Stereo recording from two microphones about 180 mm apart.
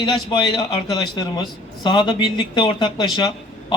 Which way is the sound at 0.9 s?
25° left (ahead or behind).